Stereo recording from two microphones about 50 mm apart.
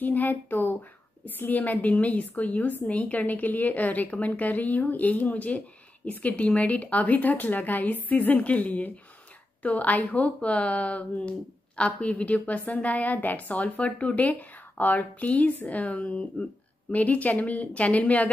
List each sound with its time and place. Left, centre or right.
0.0 s a woman's voice: left